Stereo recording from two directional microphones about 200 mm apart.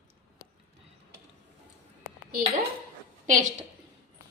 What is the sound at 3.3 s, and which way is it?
Speech, 40° right (ahead or behind).